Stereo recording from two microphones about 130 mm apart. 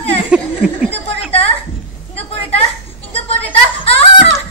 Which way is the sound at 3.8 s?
50° left (ahead or behind).